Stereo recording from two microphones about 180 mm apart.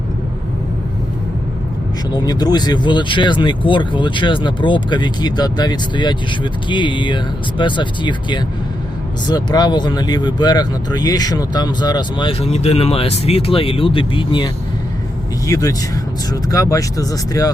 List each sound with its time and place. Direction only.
2.1 s speech: 25° left (ahead or behind)